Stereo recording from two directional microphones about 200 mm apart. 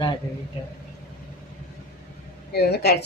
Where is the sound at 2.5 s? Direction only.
55° left (ahead or behind).